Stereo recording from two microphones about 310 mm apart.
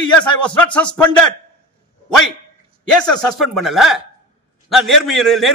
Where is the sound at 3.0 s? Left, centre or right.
Centre.